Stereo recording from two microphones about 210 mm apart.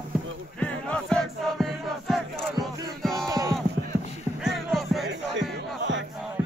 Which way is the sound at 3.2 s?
15° right (ahead or behind).